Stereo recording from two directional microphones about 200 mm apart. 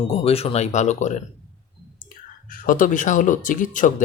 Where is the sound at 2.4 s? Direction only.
45° left (ahead or behind).